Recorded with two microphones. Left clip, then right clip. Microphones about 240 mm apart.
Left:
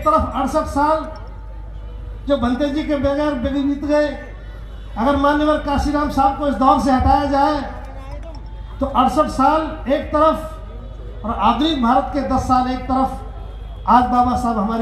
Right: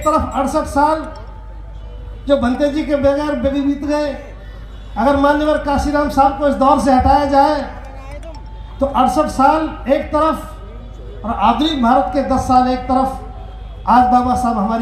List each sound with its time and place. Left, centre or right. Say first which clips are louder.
0.0 s a man's voice: right 1 dB; right
2.2 s a man's voice: right 4 dB; right
8.8 s a man's voice: right 2 dB; right